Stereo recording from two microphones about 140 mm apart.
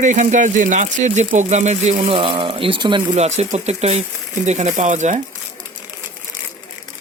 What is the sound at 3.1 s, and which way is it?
Speech, 55° right (ahead or behind).